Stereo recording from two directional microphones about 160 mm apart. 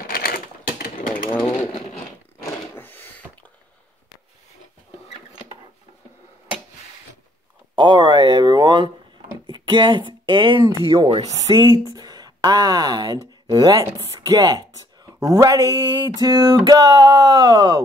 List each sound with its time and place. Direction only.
0.0 s typewriter: 70° left (ahead or behind)
2.5 s a sound: 15° left (ahead or behind)
7.7 s a sound: 30° right (ahead or behind)
9.5 s speech: 30° right (ahead or behind)
11.4 s speech: 25° right (ahead or behind)
13.5 s music: 25° right (ahead or behind)